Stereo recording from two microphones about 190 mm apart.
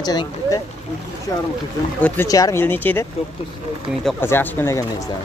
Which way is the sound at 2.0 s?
10° left (ahead or behind).